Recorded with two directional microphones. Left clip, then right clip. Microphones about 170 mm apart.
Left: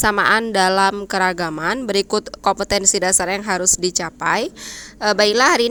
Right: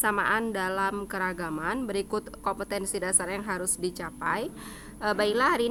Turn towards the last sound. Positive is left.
turn(degrees=30)  # may be behind; listen again after turning